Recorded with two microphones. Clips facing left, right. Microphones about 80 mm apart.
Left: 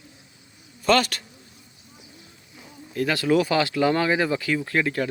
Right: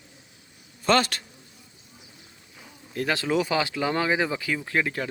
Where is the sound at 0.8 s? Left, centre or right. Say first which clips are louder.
Left 2 dB; right.